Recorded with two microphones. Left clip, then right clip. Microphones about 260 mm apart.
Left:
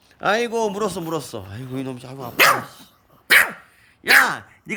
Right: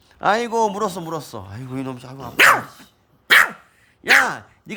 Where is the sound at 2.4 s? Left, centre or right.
Centre.